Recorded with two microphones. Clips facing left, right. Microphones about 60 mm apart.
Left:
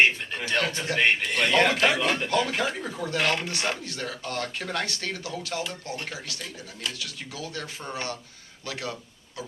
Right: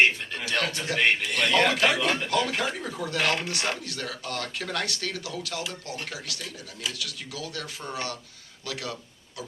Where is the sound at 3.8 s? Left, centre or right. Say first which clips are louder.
Left 1 dB; left.